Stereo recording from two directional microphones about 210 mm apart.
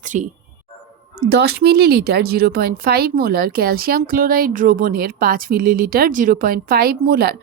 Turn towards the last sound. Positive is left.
turn(degrees=-50)  # may be behind; listen again after turning